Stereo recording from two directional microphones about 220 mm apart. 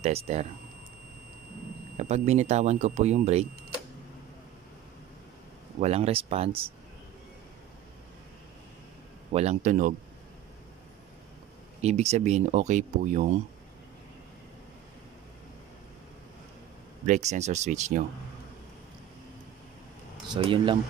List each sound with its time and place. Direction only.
0.0 s speech: 30° right (ahead or behind)
2.0 s speech: 30° right (ahead or behind)
5.8 s speech: 30° right (ahead or behind)
9.3 s speech: 30° right (ahead or behind)
11.8 s speech: 30° right (ahead or behind)
17.0 s speech: 30° right (ahead or behind)
20.2 s speech: 20° right (ahead or behind)